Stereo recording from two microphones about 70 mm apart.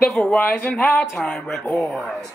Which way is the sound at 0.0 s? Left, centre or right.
Left.